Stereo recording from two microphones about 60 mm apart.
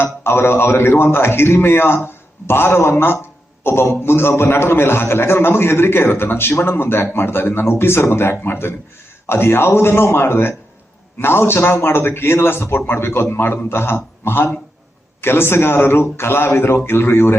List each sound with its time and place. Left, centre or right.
0.0 s a man's voice: left